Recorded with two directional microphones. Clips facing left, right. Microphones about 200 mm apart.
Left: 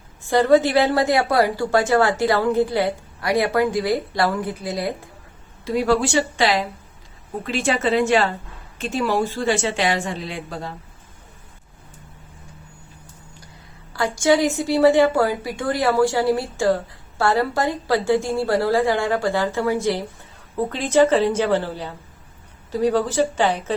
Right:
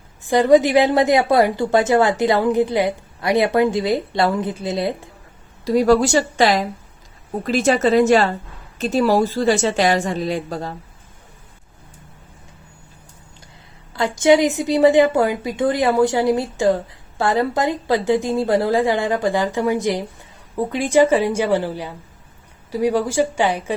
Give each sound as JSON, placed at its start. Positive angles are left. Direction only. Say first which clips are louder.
{"t": 0.2, "sound": "a woman's voice", "louder": "right 2 dB", "side_deg": -15}
{"t": 5.6, "sound": "a woman's voice", "louder": "right 5 dB", "side_deg": -40}
{"t": 13.9, "sound": "a woman's voice", "louder": "right 3 dB", "side_deg": -20}